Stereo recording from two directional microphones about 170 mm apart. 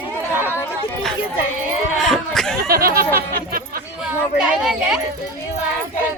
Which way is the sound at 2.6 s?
60° right (ahead or behind).